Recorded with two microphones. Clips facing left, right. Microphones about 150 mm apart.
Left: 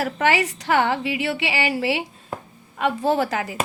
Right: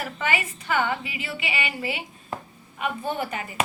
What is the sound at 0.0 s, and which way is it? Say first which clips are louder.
A woman's voice: left 7 dB; 75° left (ahead or behind).